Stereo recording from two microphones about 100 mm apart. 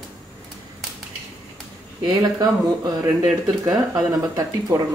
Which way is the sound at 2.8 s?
35° right (ahead or behind).